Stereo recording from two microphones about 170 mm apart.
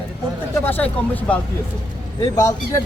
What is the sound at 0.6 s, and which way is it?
A man's voice, 10° left (ahead or behind).